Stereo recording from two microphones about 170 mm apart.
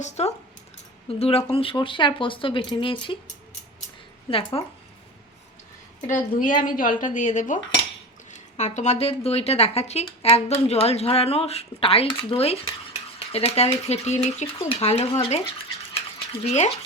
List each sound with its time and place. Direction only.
0.0 s speech: 40° left (ahead or behind)
4.3 s speech: 35° left (ahead or behind)
6.1 s a woman's voice: 50° left (ahead or behind); by 12.7 s 35° left (ahead or behind)
13.1 s a sound: 35° left (ahead or behind)
13.8 s speech: 40° left (ahead or behind)
16.4 s speech: 40° left (ahead or behind)